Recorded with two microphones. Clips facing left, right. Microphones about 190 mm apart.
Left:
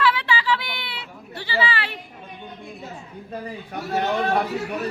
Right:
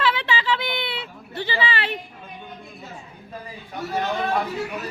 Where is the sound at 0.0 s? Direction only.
20° right (ahead or behind).